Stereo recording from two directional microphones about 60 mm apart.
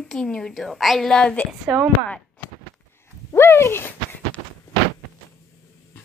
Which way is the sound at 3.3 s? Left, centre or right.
Left.